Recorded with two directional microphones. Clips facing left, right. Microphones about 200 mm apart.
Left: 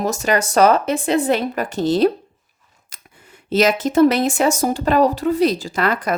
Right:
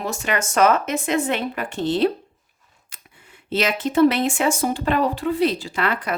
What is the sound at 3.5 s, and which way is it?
A woman's voice, 40° left (ahead or behind).